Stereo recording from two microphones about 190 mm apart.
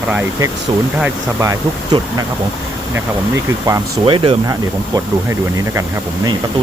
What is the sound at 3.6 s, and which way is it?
Speech, 20° right (ahead or behind).